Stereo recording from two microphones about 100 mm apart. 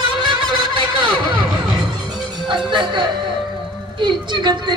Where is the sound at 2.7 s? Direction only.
50° right (ahead or behind).